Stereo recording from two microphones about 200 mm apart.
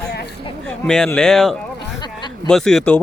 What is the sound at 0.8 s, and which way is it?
Speech, 5° left (ahead or behind).